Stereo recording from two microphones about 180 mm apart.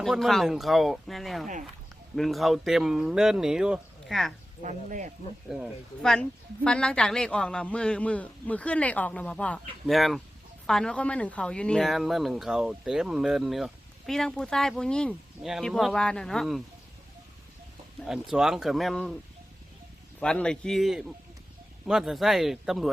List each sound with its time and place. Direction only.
0.0 s speech: centre (ahead or behind)
4.6 s speech: 45° right (ahead or behind)
5.5 s a man's voice: centre (ahead or behind)
18.0 s speech: centre (ahead or behind)
20.1 s speech: 5° left (ahead or behind)